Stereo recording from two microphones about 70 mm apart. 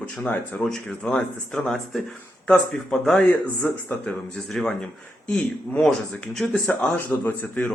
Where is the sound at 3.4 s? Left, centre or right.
Left.